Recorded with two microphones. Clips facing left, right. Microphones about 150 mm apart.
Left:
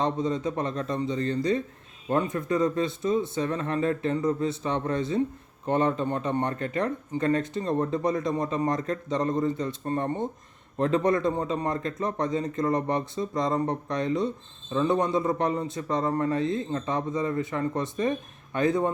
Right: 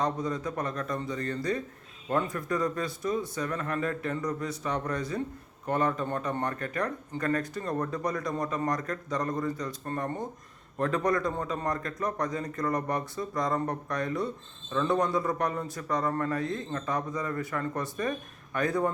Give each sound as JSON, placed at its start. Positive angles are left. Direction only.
{"t": 0.0, "sound": "speech", "side_deg": 25}